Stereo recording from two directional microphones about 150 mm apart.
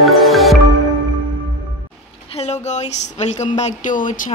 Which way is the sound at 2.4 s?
50° left (ahead or behind).